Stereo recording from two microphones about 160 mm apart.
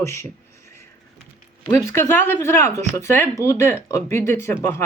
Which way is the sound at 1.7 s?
15° left (ahead or behind).